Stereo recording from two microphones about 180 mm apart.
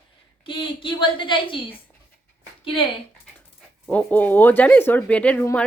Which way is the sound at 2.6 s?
30° left (ahead or behind).